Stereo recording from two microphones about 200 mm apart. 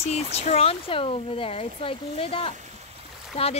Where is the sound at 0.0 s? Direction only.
30° left (ahead or behind).